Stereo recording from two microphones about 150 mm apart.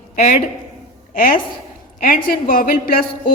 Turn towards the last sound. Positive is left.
turn(degrees=75)  # may be behind; listen again after turning